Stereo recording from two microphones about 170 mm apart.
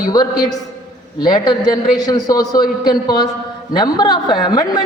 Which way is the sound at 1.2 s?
25° left (ahead or behind).